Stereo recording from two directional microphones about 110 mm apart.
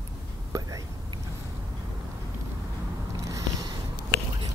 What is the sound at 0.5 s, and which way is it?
Speech, 35° right (ahead or behind).